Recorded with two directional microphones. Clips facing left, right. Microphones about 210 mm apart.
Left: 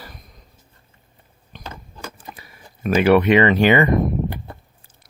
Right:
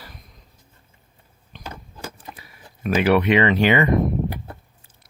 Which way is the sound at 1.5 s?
45° left (ahead or behind).